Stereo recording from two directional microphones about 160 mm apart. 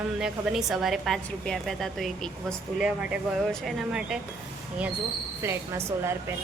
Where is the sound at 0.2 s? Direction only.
5° right (ahead or behind).